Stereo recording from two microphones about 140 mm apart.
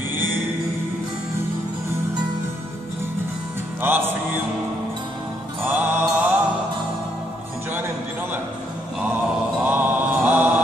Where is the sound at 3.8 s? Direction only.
15° right (ahead or behind).